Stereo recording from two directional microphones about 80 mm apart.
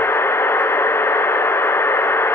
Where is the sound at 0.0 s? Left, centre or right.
Left.